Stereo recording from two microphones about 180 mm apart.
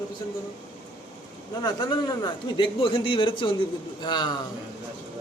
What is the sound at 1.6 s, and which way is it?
A man's voice, 25° left (ahead or behind).